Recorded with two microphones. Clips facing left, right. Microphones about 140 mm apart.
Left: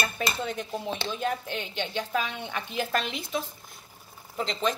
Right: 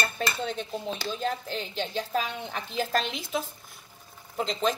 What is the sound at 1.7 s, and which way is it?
Speech, 40° right (ahead or behind).